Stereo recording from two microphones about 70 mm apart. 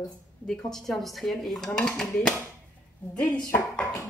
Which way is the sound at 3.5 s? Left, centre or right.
Left.